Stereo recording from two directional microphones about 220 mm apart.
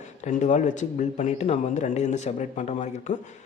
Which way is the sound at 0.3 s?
35° left (ahead or behind).